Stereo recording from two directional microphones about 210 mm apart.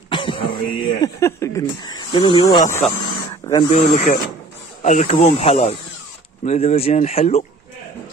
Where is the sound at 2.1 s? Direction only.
25° left (ahead or behind).